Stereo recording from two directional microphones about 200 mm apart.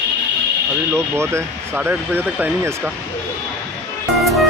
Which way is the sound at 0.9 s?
15° right (ahead or behind).